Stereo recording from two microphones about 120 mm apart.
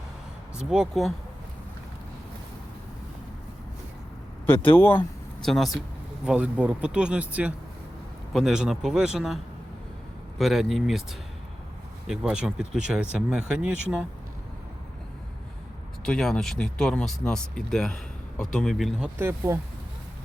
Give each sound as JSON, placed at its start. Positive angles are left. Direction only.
{"t": 0.5, "sound": "speech", "side_deg": -5}
{"t": 4.4, "sound": "speech", "side_deg": 15}
{"t": 5.4, "sound": "speech", "side_deg": 0}
{"t": 6.2, "sound": "speech", "side_deg": -10}
{"t": 12.0, "sound": "speech", "side_deg": -5}
{"t": 16.0, "sound": "speech", "side_deg": 5}
{"t": 19.2, "sound": "speech", "side_deg": -20}